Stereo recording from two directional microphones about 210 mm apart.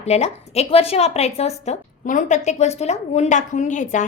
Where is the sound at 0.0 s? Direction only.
30° left (ahead or behind).